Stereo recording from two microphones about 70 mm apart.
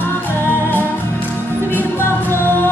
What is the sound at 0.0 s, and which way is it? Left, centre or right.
Music, left.